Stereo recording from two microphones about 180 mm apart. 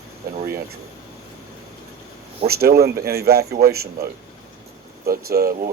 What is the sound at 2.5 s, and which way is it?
A man's voice, 60° right (ahead or behind).